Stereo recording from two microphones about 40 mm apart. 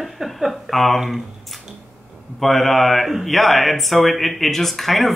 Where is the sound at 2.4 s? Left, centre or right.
Centre.